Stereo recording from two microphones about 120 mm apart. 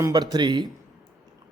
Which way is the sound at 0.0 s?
35° right (ahead or behind).